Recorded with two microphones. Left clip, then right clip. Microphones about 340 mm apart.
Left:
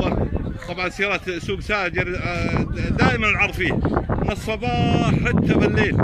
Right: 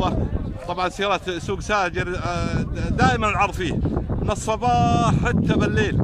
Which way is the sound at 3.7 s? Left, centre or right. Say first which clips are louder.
Left 5 dB; left.